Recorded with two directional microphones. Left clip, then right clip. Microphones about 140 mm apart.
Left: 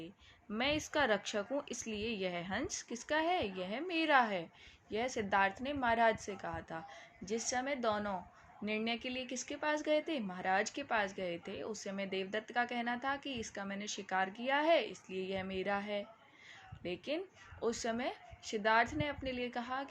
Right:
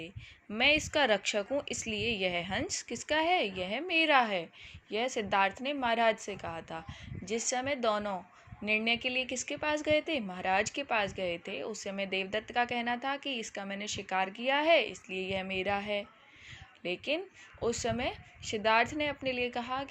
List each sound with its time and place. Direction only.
0.5 s a woman's voice: 25° right (ahead or behind)